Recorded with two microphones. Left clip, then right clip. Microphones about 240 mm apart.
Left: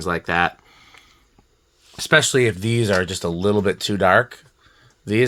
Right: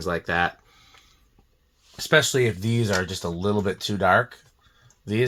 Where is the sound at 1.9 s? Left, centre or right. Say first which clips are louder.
Left 4 dB; left.